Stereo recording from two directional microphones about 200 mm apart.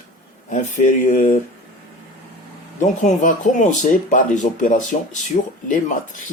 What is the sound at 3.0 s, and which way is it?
Speech, 40° left (ahead or behind).